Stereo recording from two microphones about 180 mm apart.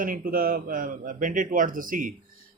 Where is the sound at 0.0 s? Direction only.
50° right (ahead or behind).